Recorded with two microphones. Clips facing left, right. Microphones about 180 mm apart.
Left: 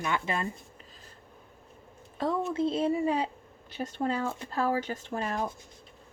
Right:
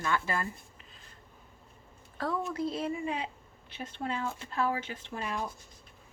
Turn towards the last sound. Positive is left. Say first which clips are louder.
# left 4 dB
turn(degrees=45)  # may be behind; listen again after turning